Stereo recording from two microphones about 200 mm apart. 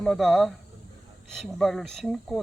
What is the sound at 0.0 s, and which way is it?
Speech, centre (ahead or behind).